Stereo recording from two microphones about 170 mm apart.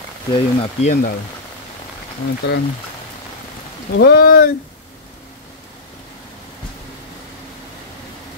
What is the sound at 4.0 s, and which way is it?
Speech, 65° left (ahead or behind).